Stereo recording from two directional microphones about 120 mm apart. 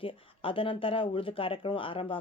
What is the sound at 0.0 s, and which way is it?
Speech, 50° left (ahead or behind).